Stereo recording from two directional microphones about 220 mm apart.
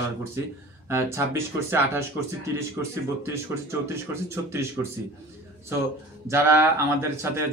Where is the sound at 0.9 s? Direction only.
10° right (ahead or behind).